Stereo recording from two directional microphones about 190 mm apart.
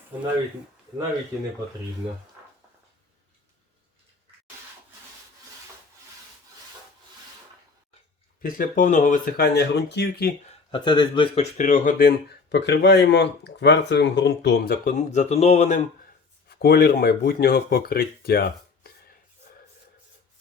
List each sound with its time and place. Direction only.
8.4 s speech: 45° left (ahead or behind)
9.6 s speech: 60° left (ahead or behind)
10.5 s speech: 25° left (ahead or behind)
11.5 s speech: 40° left (ahead or behind)
14.9 s speech: 40° left (ahead or behind)
16.5 s speech: 55° left (ahead or behind)